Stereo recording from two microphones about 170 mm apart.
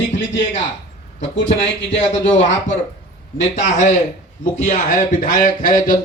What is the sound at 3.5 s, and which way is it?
Speech, 45° left (ahead or behind).